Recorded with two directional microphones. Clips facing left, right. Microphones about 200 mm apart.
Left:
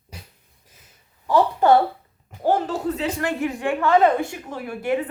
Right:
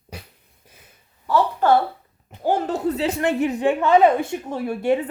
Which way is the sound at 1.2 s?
15° left (ahead or behind).